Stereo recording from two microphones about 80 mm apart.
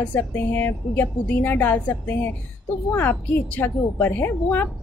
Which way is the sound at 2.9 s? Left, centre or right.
Left.